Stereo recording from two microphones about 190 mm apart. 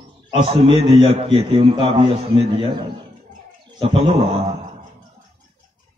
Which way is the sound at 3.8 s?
30° right (ahead or behind).